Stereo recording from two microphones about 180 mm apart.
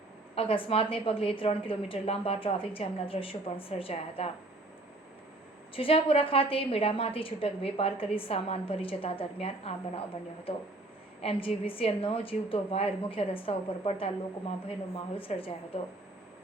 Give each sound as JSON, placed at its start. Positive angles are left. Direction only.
{"t": 0.3, "sound": "a woman's voice", "side_deg": 30}
{"t": 5.7, "sound": "a woman's voice", "side_deg": 30}
{"t": 11.2, "sound": "a woman's voice", "side_deg": 30}